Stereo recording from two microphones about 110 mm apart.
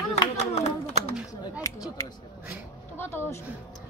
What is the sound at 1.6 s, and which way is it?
A woman's voice, 30° left (ahead or behind).